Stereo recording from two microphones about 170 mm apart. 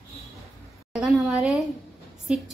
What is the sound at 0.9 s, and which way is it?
Speech, 5° right (ahead or behind).